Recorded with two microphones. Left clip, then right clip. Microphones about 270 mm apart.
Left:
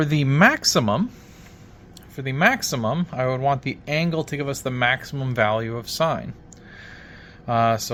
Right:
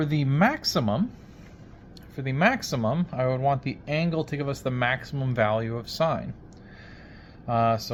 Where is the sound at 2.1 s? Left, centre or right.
Centre.